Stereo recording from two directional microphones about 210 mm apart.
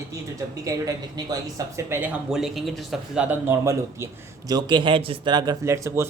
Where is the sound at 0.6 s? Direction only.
15° right (ahead or behind).